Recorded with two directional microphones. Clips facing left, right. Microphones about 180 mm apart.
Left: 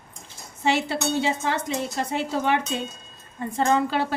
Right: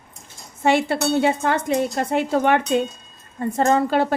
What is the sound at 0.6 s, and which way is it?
A woman's voice, 55° right (ahead or behind).